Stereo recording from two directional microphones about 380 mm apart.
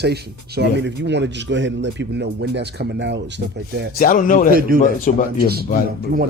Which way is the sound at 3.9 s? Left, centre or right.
Left.